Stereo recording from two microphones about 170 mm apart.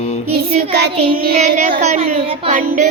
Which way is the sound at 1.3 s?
45° right (ahead or behind).